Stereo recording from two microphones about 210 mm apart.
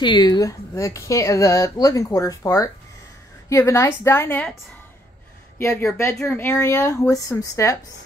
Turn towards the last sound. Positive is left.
turn(degrees=15)  # may be behind; listen again after turning